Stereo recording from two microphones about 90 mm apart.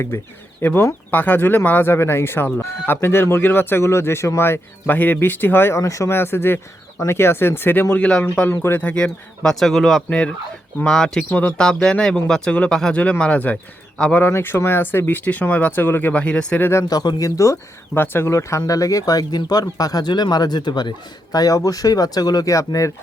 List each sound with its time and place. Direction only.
0.6 s speech: 20° left (ahead or behind)
5.8 s speech: 35° left (ahead or behind); by 13.6 s 15° left (ahead or behind)
14.1 s speech: 25° left (ahead or behind)
16.9 s speech: 50° left (ahead or behind)
17.9 s speech: 25° left (ahead or behind); by 20.9 s 55° left (ahead or behind)
21.3 s speech: 40° left (ahead or behind)